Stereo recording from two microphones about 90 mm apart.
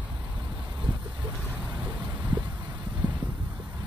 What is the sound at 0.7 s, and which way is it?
Vehicle, 60° right (ahead or behind).